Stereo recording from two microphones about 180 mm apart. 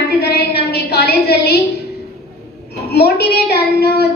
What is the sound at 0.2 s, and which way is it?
A woman's voice, 65° left (ahead or behind).